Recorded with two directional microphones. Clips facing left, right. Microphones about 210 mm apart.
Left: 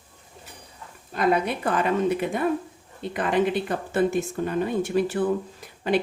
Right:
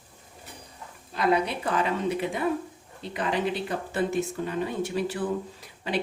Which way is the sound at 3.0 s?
50° left (ahead or behind).